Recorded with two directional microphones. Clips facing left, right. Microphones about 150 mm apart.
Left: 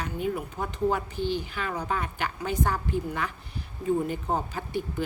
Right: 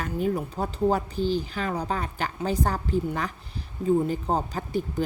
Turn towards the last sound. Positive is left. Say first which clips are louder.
# right 3 dB
turn(degrees=-40)  # may be behind; listen again after turning